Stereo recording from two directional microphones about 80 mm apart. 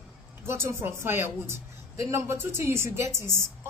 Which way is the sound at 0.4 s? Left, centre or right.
Right.